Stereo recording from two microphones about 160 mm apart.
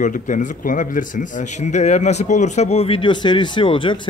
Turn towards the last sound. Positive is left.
turn(degrees=30)  # may be behind; listen again after turning